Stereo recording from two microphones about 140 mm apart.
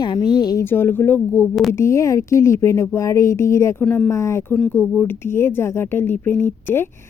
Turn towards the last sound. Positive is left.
turn(degrees=15)  # may be behind; listen again after turning